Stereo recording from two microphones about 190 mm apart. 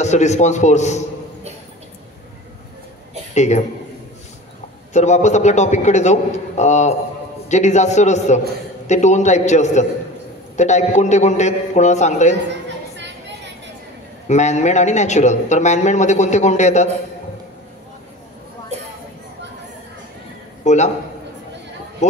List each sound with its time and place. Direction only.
0.0 s speech: 35° left (ahead or behind)
3.3 s speech: 35° left (ahead or behind)
4.9 s speech: 40° left (ahead or behind)
14.2 s speech: 35° left (ahead or behind)
20.6 s a man's voice: 35° left (ahead or behind)